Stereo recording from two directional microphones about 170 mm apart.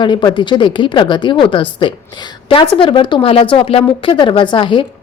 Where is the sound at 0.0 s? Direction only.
25° left (ahead or behind).